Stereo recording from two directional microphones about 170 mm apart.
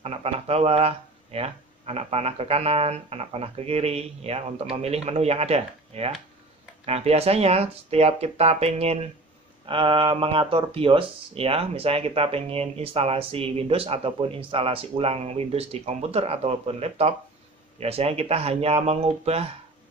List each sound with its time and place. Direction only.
0.0 s speech: 35° right (ahead or behind)